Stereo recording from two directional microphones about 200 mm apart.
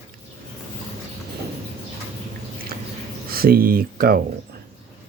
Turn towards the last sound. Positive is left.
turn(degrees=-45)  # may be behind; listen again after turning